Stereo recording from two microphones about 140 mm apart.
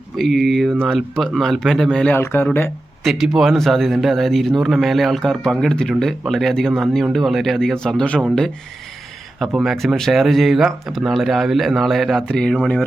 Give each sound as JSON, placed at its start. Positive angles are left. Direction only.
{"t": 0.2, "sound": "speech", "side_deg": 0}
{"t": 2.1, "sound": "speech", "side_deg": 15}
{"t": 3.0, "sound": "speech", "side_deg": 0}
{"t": 9.4, "sound": "speech", "side_deg": -5}